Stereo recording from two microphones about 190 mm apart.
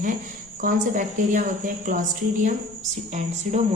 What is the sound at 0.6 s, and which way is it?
A woman's voice, 45° right (ahead or behind).